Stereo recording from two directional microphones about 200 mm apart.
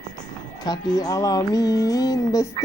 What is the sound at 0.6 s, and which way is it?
Speech, 20° left (ahead or behind).